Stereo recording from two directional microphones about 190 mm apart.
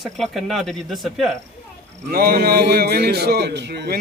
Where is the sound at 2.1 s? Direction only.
55° right (ahead or behind).